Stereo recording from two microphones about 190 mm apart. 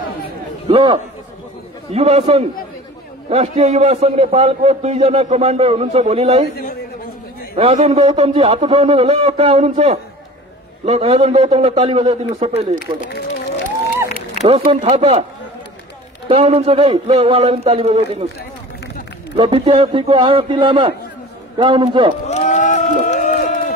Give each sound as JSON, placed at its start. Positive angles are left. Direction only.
{"t": 0.7, "sound": "a man's voice", "side_deg": -25}
{"t": 7.5, "sound": "a man's voice", "side_deg": -35}
{"t": 14.4, "sound": "a man's voice", "side_deg": -35}
{"t": 16.3, "sound": "a man's voice", "side_deg": -30}
{"t": 19.3, "sound": "speech", "side_deg": -30}
{"t": 22.2, "sound": "run", "side_deg": 35}